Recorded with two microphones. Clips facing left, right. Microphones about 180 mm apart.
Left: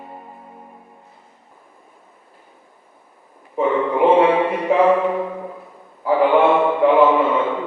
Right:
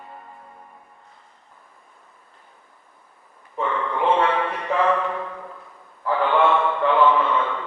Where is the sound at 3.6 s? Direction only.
15° left (ahead or behind).